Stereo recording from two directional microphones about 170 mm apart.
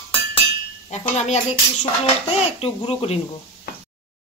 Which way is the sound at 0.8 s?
40° left (ahead or behind).